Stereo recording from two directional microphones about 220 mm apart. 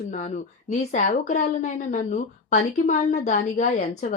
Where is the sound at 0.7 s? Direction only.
35° left (ahead or behind).